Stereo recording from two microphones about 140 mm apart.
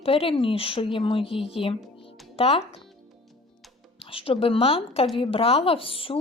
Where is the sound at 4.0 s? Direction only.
40° left (ahead or behind).